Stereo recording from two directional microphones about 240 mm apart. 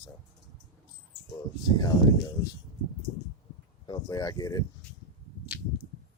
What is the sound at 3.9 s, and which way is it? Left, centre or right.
Speech, centre.